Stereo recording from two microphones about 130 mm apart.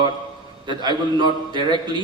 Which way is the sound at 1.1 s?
35° right (ahead or behind).